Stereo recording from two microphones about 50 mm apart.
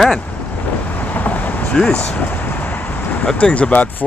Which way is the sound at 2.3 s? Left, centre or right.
Left.